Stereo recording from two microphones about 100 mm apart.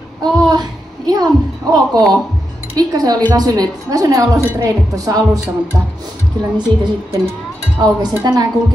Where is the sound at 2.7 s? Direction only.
40° right (ahead or behind).